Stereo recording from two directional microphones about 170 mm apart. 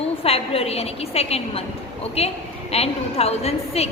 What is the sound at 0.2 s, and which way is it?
A woman's voice, 35° left (ahead or behind).